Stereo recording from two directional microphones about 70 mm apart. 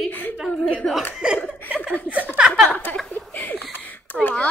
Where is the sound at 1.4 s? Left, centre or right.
Left.